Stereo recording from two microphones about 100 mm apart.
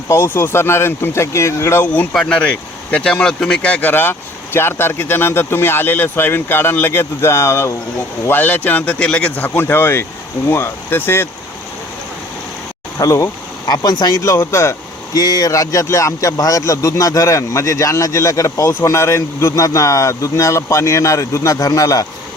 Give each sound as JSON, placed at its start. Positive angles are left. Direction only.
{"t": 0.1, "sound": "speech", "side_deg": 25}
{"t": 2.1, "sound": "speech", "side_deg": 10}
{"t": 13.0, "sound": "speech", "side_deg": 35}
{"t": 14.2, "sound": "speech", "side_deg": 30}
{"t": 15.1, "sound": "speech", "side_deg": 40}